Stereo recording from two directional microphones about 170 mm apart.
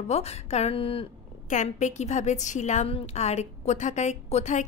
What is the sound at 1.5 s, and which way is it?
A woman's voice, 45° left (ahead or behind).